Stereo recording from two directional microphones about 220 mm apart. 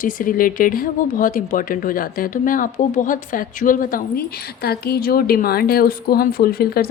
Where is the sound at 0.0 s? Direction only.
40° left (ahead or behind).